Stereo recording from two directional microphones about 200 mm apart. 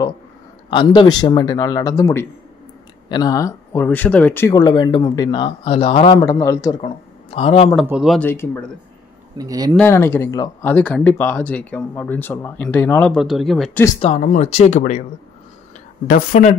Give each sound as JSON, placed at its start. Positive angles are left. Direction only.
{"t": 0.7, "sound": "speech", "side_deg": 25}
{"t": 6.2, "sound": "speech", "side_deg": 15}
{"t": 6.8, "sound": "speech", "side_deg": 30}
{"t": 7.8, "sound": "speech", "side_deg": -5}
{"t": 8.3, "sound": "speech", "side_deg": 10}
{"t": 9.4, "sound": "speech", "side_deg": -20}
{"t": 9.8, "sound": "speech", "side_deg": 10}
{"t": 13.9, "sound": "speech", "side_deg": 35}
{"t": 16.1, "sound": "speech", "side_deg": 45}